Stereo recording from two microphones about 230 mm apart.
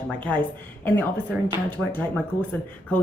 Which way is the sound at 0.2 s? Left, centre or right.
Centre.